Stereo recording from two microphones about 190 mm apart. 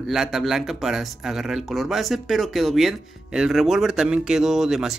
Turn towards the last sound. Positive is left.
turn(degrees=0)  # may be behind; listen again after turning